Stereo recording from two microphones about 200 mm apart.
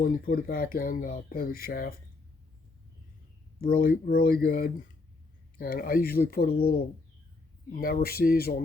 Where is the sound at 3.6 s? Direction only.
45° left (ahead or behind).